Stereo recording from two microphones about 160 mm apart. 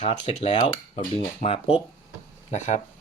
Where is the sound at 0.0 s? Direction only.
40° left (ahead or behind).